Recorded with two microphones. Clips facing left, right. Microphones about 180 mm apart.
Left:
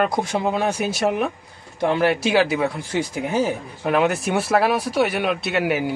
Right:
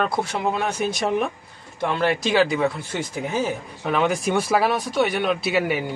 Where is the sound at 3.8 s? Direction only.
5° left (ahead or behind).